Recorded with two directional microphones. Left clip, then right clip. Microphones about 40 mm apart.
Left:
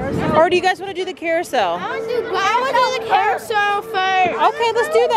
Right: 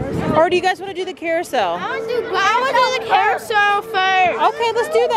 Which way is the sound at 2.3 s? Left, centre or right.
Right.